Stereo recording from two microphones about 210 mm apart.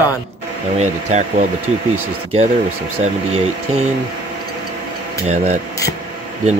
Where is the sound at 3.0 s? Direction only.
30° right (ahead or behind).